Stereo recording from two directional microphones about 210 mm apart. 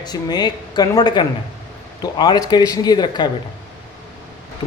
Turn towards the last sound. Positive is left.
turn(degrees=20)  # may be behind; listen again after turning